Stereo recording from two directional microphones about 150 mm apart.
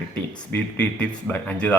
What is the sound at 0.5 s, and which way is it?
A man's voice, 10° left (ahead or behind).